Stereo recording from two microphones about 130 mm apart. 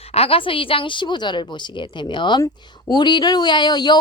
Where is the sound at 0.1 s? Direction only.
50° left (ahead or behind).